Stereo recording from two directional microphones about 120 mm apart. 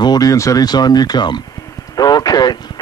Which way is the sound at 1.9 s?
30° left (ahead or behind).